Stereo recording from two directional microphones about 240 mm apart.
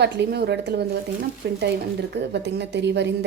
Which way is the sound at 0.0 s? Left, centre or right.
Right.